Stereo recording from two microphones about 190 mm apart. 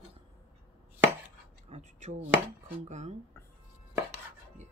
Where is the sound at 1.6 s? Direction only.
35° right (ahead or behind).